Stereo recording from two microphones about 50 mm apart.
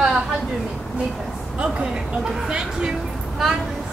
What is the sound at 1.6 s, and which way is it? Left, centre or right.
Speech, right.